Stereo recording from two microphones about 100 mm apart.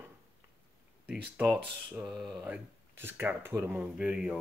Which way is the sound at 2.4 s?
20° right (ahead or behind).